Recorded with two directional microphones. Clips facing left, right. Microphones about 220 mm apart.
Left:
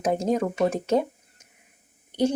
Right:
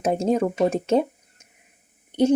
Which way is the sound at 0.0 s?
25° right (ahead or behind).